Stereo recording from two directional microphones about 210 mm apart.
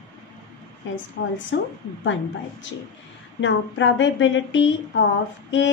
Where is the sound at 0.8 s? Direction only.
60° left (ahead or behind).